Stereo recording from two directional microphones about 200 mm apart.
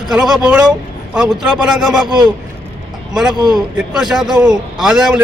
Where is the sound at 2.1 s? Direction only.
20° right (ahead or behind).